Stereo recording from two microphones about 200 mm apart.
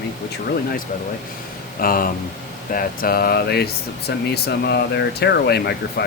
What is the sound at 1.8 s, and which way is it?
Speech, 45° left (ahead or behind).